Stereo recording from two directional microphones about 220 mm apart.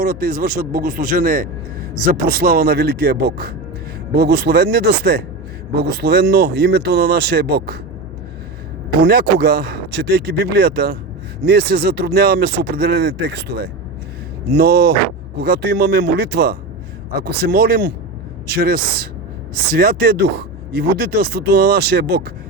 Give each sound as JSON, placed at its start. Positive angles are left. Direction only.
{"t": 0.0, "sound": "speech", "side_deg": -40}
{"t": 9.0, "sound": "speech", "side_deg": -45}